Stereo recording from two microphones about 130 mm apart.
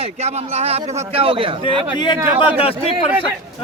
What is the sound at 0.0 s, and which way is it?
A man's voice, 55° right (ahead or behind).